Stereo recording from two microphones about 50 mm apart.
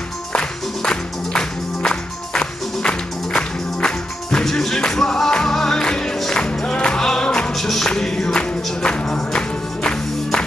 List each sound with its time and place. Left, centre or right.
0.3 s music: centre
6.5 s music: centre
7.5 s music: centre; by 9.4 s left